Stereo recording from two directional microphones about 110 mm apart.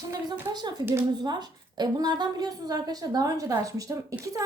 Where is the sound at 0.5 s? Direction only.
40° right (ahead or behind).